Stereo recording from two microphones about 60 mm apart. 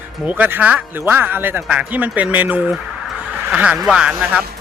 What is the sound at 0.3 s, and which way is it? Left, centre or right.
Speech, right.